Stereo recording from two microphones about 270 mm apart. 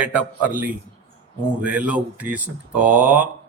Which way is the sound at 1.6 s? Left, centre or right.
Centre.